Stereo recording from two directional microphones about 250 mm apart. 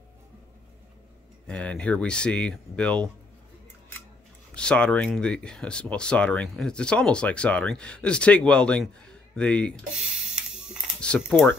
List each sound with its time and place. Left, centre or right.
1.5 s speech: centre
4.6 s speech: centre
9.3 s a sound: centre